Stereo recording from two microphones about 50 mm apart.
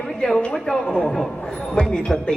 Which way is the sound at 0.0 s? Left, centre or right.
Centre.